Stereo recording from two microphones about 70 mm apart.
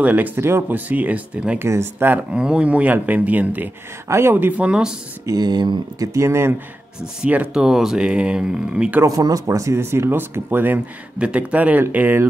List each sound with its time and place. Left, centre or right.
0.0 s speech: right
0.4 s speech: right; by 1.6 s centre
1.6 s speech: right
2.3 s speech: centre; by 4.6 s right
4.6 s speech: centre
5.2 s speech: right
6.1 s speech: right
7.2 s speech: centre
9.0 s speech: right
11.1 s speech: centre